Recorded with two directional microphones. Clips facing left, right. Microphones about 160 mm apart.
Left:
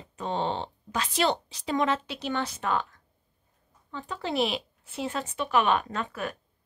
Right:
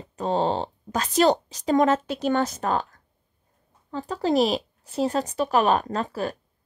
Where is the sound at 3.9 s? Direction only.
40° right (ahead or behind).